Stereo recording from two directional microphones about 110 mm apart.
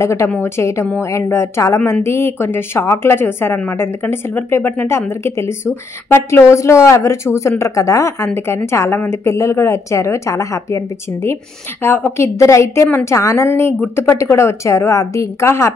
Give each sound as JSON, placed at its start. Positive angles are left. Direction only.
{"t": 0.0, "sound": "a woman's voice", "side_deg": 25}
{"t": 11.8, "sound": "a woman's voice", "side_deg": 20}